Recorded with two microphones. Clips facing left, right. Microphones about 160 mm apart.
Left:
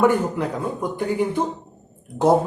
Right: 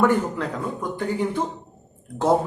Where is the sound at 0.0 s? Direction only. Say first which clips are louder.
Left 2 dB; 15° left (ahead or behind).